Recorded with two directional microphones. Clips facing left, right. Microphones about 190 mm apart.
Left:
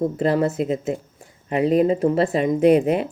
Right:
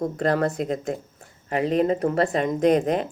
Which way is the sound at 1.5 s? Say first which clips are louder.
Left 4 dB; 35° left (ahead or behind).